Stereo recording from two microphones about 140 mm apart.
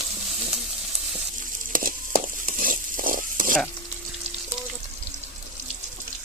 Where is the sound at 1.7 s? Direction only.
80° right.